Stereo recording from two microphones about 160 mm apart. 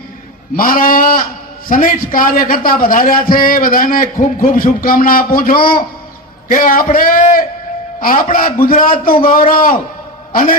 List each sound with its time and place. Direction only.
0.5 s a man's voice: 60° left (ahead or behind)